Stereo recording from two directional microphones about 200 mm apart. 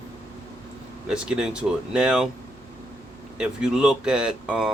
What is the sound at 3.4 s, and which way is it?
Speech, 5° right (ahead or behind).